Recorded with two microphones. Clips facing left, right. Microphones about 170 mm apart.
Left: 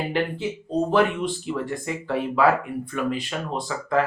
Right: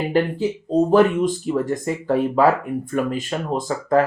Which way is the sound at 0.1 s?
40° right (ahead or behind).